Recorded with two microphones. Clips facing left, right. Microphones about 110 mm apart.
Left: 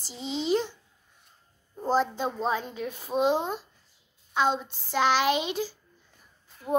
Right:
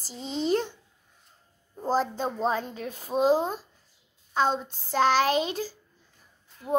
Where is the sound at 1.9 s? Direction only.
35° right (ahead or behind).